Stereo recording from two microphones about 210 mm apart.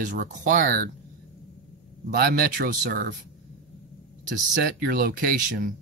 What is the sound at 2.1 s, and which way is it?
Speech, 45° right (ahead or behind).